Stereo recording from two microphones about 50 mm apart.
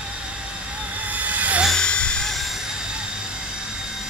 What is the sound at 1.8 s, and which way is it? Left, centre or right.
Helicopter, centre.